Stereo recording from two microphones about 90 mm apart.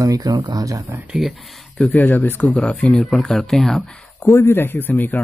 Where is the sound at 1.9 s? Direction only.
20° left (ahead or behind).